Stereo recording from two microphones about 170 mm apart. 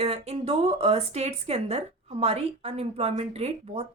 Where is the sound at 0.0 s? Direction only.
40° right (ahead or behind).